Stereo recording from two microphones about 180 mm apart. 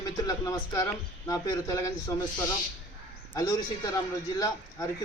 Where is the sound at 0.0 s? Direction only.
20° left (ahead or behind).